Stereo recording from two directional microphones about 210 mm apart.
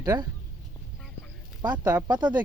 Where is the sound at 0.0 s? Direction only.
20° right (ahead or behind).